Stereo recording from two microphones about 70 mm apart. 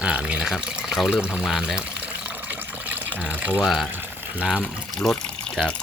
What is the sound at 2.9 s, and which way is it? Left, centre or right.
Speech, right.